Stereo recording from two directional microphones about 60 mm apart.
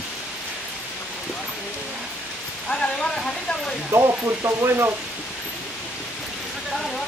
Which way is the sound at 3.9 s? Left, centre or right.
Right.